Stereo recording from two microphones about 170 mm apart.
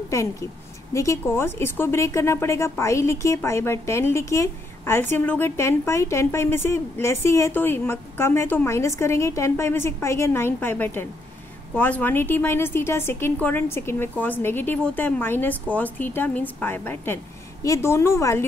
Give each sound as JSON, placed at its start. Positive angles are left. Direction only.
{"t": 0.1, "sound": "a woman's voice", "side_deg": 20}